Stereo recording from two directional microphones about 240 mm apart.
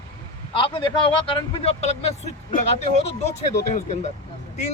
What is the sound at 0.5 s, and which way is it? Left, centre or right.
A man's voice, left.